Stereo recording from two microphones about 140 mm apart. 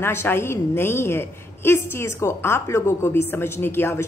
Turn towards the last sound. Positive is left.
turn(degrees=15)  # may be behind; listen again after turning